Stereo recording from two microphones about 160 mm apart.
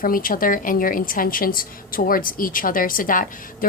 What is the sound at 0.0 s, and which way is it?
A woman's voice, 60° left (ahead or behind).